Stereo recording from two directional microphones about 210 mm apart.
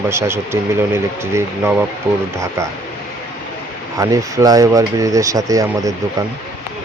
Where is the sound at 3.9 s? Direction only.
15° right (ahead or behind).